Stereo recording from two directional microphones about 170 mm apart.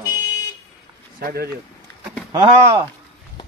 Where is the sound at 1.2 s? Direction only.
60° right (ahead or behind).